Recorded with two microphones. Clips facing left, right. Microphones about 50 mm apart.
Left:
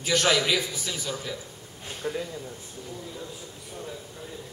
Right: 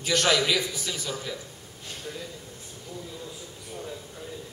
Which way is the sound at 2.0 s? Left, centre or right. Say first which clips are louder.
Left 8 dB; left.